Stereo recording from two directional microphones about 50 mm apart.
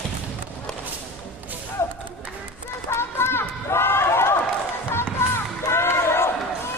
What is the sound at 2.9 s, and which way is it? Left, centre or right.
Run, left.